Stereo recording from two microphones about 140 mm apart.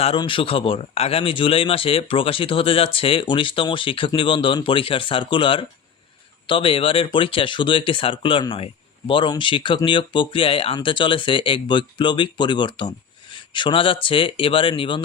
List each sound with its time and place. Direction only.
0.2 s speech: 40° left (ahead or behind)